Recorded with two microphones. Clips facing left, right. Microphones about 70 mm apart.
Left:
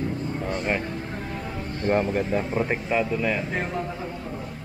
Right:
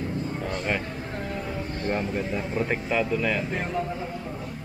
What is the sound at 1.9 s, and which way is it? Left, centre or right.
Speech, left.